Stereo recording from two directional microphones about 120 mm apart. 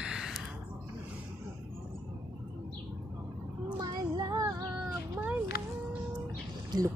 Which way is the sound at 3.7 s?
30° right (ahead or behind).